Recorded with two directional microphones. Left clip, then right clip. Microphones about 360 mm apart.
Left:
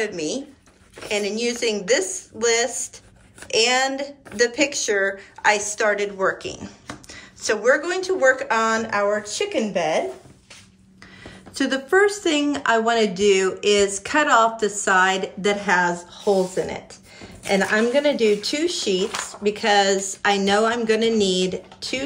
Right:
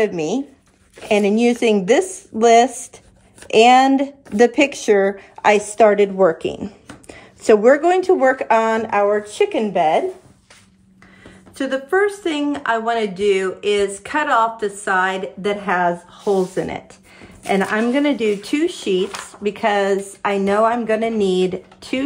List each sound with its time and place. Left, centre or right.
0.0 s a woman's voice: centre
11.5 s speech: centre
16.3 s a woman's voice: centre